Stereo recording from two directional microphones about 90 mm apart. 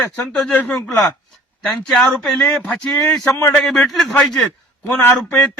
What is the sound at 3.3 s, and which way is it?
Speech, 35° left (ahead or behind).